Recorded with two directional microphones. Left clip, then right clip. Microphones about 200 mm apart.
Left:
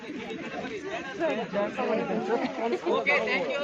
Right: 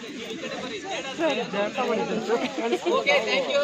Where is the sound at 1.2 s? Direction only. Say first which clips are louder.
Right 4 dB; 35° right (ahead or behind).